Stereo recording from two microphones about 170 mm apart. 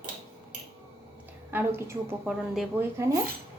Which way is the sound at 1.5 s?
10° right (ahead or behind).